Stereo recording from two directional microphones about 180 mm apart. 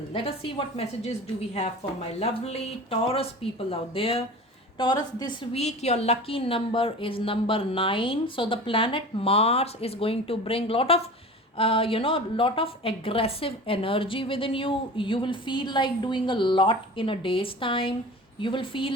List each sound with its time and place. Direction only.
0.1 s a woman's voice: 30° left (ahead or behind)
5.5 s a woman's voice: 35° left (ahead or behind)